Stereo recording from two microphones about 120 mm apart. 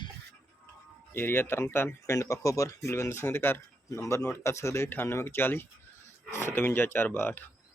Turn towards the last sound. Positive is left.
turn(degrees=15)  # may be behind; listen again after turning